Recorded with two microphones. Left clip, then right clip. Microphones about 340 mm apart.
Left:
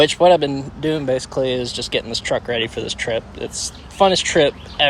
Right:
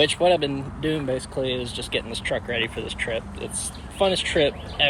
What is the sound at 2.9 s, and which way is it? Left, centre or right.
Speech, left.